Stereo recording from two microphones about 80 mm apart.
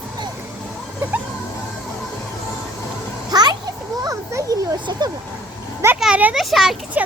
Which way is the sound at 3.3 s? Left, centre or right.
Right.